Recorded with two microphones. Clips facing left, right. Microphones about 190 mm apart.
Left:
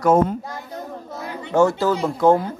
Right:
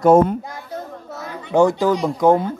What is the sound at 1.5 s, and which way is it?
Speech, 15° right (ahead or behind).